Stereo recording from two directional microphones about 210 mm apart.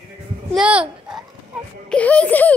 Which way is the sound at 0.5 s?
5° right (ahead or behind).